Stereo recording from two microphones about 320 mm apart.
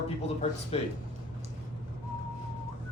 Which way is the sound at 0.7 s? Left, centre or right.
Centre.